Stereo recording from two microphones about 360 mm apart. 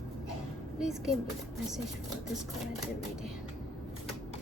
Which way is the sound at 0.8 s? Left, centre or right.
Centre.